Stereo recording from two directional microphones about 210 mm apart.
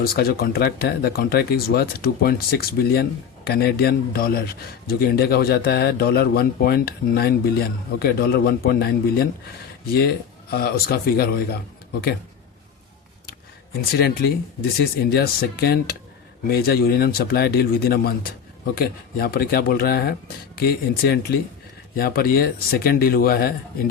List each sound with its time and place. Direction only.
0.0 s a man's voice: 45° left (ahead or behind)
10.5 s a man's voice: 45° left (ahead or behind)
13.9 s a man's voice: 50° left (ahead or behind)